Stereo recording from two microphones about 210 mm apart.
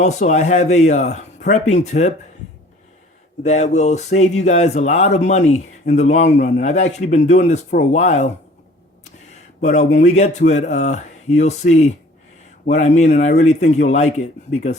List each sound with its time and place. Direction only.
0.0 s speech: 35° left (ahead or behind)
3.4 s speech: 35° left (ahead or behind)
9.3 s speech: 30° left (ahead or behind)